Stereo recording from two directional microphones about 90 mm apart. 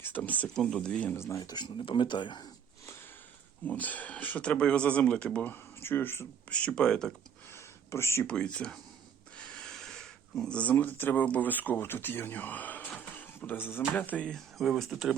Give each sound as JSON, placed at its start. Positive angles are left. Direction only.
{"t": 0.2, "sound": "speech", "side_deg": 15}
{"t": 1.1, "sound": "speech", "side_deg": 30}
{"t": 1.8, "sound": "speech", "side_deg": 70}
{"t": 3.7, "sound": "speech", "side_deg": 15}
{"t": 6.5, "sound": "speech", "side_deg": 10}
{"t": 7.5, "sound": "a sound", "side_deg": 30}
{"t": 8.3, "sound": "speech", "side_deg": 10}
{"t": 14.6, "sound": "speech", "side_deg": 0}